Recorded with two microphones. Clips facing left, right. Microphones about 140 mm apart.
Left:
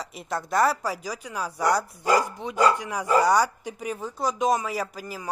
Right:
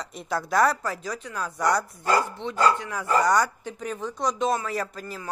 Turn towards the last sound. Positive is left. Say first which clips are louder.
# even
turn(degrees=10)  # may be behind; listen again after turning